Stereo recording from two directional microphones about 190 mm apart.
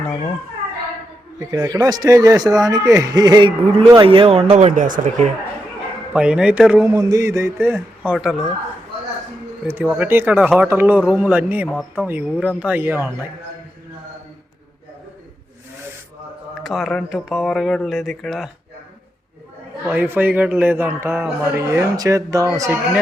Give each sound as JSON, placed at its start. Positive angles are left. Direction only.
{"t": 1.4, "sound": "a man's voice", "side_deg": -20}
{"t": 6.1, "sound": "speech", "side_deg": -5}
{"t": 6.9, "sound": "a man's voice", "side_deg": -20}
{"t": 9.6, "sound": "a man's voice", "side_deg": -10}
{"t": 16.6, "sound": "speech", "side_deg": 0}
{"t": 19.9, "sound": "a man's voice", "side_deg": -10}